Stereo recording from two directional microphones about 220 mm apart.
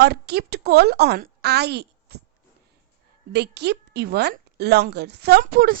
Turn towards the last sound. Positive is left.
turn(degrees=-40)  # may be behind; listen again after turning